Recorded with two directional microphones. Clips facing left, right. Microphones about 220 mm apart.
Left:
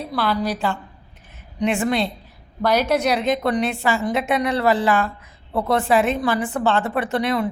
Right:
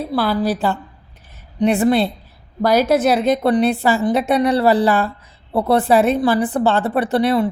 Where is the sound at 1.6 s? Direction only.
35° right (ahead or behind).